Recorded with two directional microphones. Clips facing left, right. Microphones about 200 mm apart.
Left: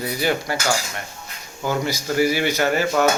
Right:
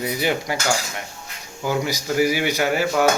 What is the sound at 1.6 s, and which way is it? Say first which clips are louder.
Speech: even; 10° right (ahead or behind).